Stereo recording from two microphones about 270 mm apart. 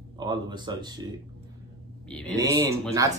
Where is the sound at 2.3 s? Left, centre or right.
Centre.